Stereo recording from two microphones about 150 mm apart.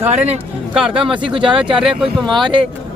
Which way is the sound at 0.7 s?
5° right (ahead or behind).